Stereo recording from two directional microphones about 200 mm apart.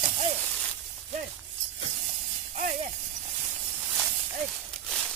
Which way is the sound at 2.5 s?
40° right (ahead or behind).